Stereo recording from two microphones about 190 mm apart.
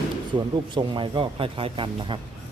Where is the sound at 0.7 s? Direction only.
25° right (ahead or behind).